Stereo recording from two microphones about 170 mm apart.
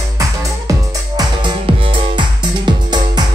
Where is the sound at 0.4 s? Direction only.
20° right (ahead or behind).